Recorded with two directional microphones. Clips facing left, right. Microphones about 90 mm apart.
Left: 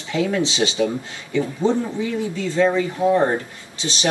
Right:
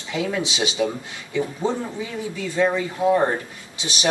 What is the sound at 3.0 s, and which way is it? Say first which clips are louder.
Speech: even; 20° right (ahead or behind).